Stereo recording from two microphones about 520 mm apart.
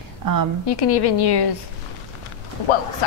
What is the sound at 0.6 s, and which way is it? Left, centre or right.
Speech, left.